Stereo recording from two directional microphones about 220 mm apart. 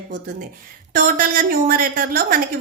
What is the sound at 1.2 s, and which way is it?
A woman's voice, 40° right (ahead or behind).